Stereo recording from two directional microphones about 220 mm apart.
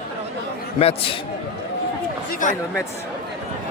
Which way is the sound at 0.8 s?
25° left (ahead or behind).